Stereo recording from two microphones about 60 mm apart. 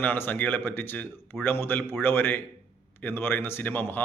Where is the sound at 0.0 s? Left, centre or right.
Left.